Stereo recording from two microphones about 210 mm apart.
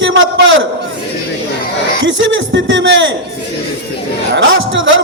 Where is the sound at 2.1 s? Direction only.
65° right (ahead or behind).